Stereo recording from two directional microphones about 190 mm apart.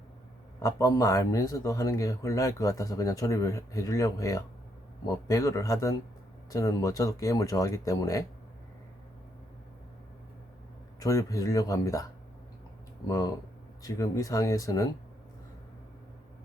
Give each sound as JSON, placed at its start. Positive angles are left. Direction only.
{"t": 0.6, "sound": "speech", "side_deg": 15}
{"t": 11.0, "sound": "speech", "side_deg": 20}
{"t": 13.1, "sound": "speech", "side_deg": 20}